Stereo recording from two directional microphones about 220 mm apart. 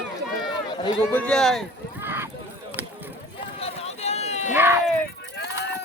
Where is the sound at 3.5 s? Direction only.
25° left (ahead or behind).